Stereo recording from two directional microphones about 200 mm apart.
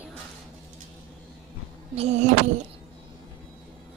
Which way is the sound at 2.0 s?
35° right (ahead or behind).